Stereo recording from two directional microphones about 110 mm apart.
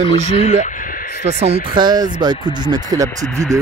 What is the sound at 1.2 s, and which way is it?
Speech, 70° right (ahead or behind).